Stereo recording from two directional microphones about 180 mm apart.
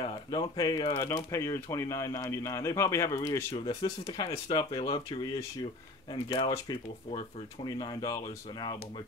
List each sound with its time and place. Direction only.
0.0 s speech: 25° left (ahead or behind)
3.5 s speech: 25° left (ahead or behind)